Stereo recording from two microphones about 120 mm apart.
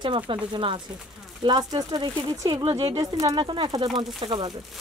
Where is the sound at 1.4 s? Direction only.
35° right (ahead or behind).